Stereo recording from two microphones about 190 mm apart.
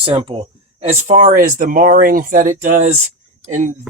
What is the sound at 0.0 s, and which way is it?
Speech, 25° right (ahead or behind).